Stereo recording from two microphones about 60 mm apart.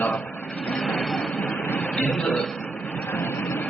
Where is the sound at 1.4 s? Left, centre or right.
Left.